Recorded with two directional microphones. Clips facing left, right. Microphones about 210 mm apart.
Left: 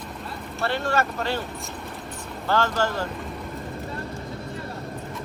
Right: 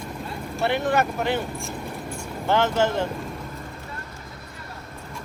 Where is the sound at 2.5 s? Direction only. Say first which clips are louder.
Right 3 dB; 20° right (ahead or behind).